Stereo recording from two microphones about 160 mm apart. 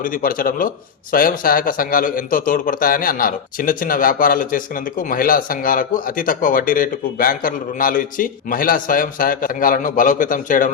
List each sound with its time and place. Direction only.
0.0 s a man's voice: 60° left (ahead or behind)